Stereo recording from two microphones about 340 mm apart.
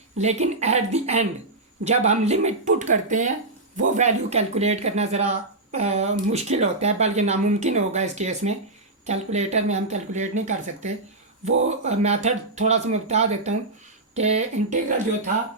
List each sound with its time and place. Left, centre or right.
0.2 s speech: centre